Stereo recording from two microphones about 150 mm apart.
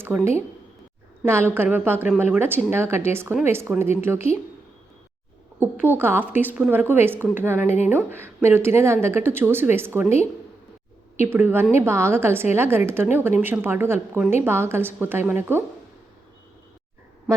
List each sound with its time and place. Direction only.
0.1 s speech: centre (ahead or behind)
1.2 s a woman's voice: 15° right (ahead or behind)
5.8 s a woman's voice: 15° right (ahead or behind)
11.3 s a woman's voice: 15° right (ahead or behind)